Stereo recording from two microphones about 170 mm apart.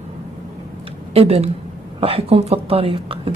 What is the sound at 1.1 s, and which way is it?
Speech, 35° right (ahead or behind).